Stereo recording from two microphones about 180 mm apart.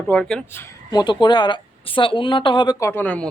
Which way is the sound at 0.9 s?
25° left (ahead or behind).